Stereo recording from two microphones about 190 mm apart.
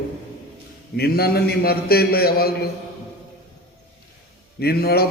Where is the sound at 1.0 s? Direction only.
55° left (ahead or behind).